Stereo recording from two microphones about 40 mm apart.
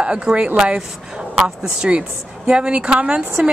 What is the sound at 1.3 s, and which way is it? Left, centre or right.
Speech, centre.